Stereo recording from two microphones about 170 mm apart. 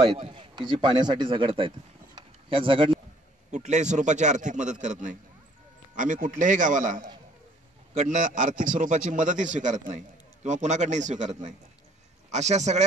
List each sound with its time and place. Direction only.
0.2 s speech: 30° right (ahead or behind)
2.1 s a sound: 30° right (ahead or behind)
3.5 s a man's voice: 45° right (ahead or behind)